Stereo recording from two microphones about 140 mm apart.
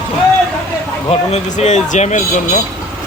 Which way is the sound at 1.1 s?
55° left (ahead or behind).